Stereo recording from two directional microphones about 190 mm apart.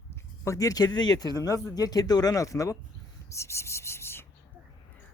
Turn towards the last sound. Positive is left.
turn(degrees=10)  # may be behind; listen again after turning